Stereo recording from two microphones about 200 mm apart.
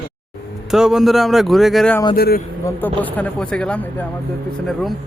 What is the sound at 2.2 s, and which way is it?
Speech, 50° left (ahead or behind).